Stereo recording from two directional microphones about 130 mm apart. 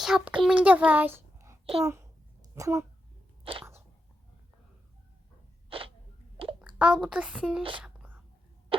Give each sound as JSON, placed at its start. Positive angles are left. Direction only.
{"t": 0.0, "sound": "a child's voice", "side_deg": -5}
{"t": 3.4, "sound": "a sound", "side_deg": -45}
{"t": 5.6, "sound": "sneeze", "side_deg": -45}
{"t": 6.6, "sound": "a woman's voice", "side_deg": -10}
{"t": 7.8, "sound": "whispering", "side_deg": -5}